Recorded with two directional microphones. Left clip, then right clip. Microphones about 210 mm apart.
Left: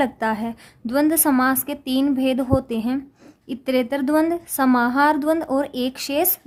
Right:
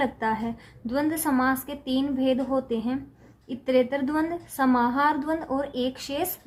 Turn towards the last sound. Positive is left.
turn(degrees=50)  # may be behind; listen again after turning